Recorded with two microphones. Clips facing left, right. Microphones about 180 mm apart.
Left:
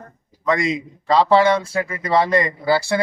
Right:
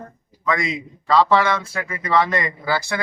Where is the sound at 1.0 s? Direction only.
30° left (ahead or behind).